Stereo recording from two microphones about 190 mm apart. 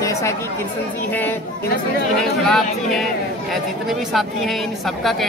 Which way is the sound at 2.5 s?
Centre (ahead or behind).